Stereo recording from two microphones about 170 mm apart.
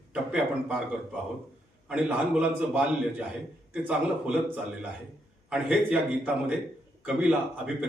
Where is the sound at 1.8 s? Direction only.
5° right (ahead or behind).